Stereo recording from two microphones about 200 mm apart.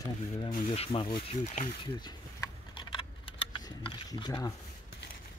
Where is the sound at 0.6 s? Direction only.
30° left (ahead or behind).